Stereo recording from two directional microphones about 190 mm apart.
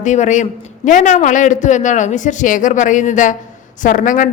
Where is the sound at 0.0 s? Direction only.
40° left (ahead or behind).